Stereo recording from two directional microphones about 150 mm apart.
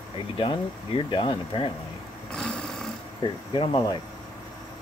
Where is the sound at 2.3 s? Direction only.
5° left (ahead or behind).